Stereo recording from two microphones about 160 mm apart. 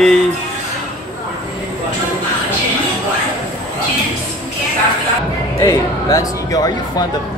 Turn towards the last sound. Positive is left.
turn(degrees=25)  # may be behind; listen again after turning